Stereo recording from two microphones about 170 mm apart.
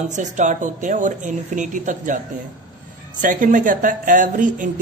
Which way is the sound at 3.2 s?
50° right (ahead or behind).